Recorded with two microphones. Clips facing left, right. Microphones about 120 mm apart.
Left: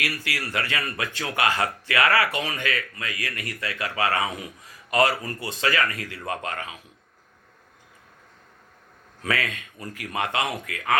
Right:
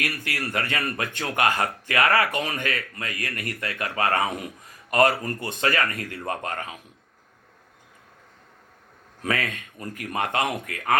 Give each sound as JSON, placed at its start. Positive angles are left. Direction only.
{"t": 0.3, "sound": "speech", "side_deg": -30}
{"t": 0.6, "sound": "speech", "side_deg": -45}
{"t": 9.2, "sound": "a man's voice", "side_deg": -40}